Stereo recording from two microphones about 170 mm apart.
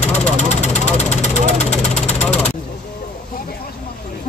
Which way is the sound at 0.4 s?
40° left (ahead or behind).